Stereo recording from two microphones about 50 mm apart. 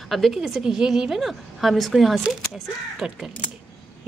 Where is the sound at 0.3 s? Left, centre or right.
Centre.